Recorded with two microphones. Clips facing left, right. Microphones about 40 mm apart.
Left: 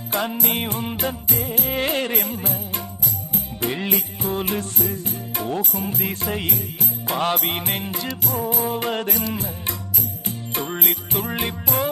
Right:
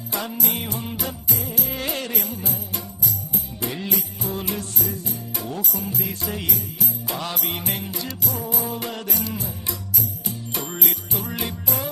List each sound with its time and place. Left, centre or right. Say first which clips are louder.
0.1 s music: left 4 dB; left